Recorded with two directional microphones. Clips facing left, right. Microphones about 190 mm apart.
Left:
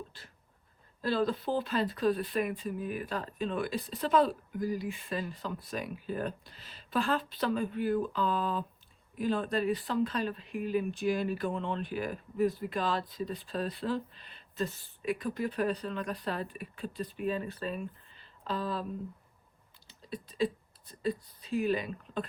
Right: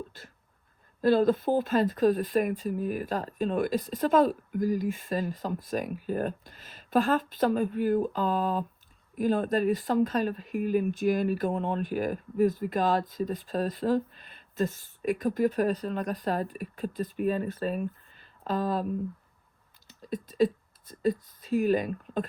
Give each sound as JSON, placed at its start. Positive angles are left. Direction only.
{"t": 0.1, "sound": "a sound", "side_deg": -45}
{"t": 1.0, "sound": "speech", "side_deg": -50}
{"t": 19.9, "sound": "speech", "side_deg": -50}